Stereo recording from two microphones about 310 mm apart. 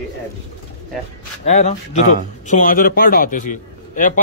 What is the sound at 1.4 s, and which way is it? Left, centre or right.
A man's voice, left.